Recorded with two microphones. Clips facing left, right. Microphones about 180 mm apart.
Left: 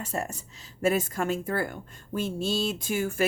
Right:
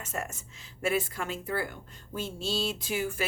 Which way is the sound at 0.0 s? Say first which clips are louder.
Left 4 dB; 35° left (ahead or behind).